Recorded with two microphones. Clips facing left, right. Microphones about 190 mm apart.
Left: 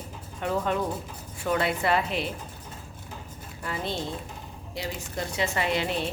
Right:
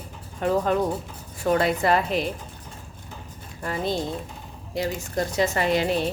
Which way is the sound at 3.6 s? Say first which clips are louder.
Right 5 dB; 45° right (ahead or behind).